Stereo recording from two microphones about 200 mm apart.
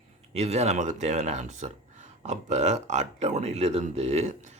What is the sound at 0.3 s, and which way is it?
Speech, 35° right (ahead or behind).